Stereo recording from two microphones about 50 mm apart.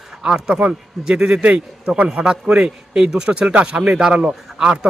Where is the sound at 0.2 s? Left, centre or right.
Centre.